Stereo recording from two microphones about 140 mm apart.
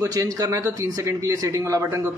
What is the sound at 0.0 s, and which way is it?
Speech, 25° right (ahead or behind).